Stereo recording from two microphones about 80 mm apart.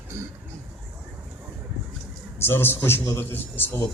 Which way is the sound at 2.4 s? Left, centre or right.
Left.